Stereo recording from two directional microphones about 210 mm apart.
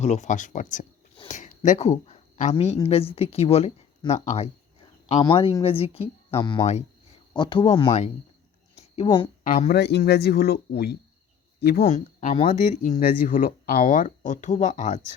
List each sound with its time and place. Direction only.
0.0 s speech: 35° left (ahead or behind)
9.4 s speech: 40° left (ahead or behind)
11.9 s speech: 35° left (ahead or behind)